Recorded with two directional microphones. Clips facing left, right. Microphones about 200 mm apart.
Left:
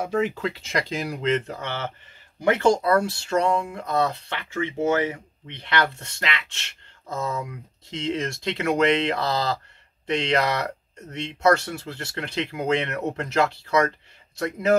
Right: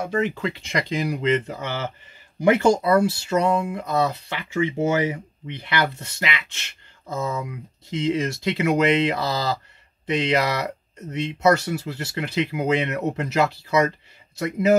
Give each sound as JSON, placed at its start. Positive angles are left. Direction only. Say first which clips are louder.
{"t": 0.0, "sound": "speech", "louder": "even", "side_deg": 5}